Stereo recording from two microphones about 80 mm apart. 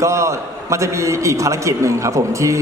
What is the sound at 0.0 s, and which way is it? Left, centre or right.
A man's voice, right.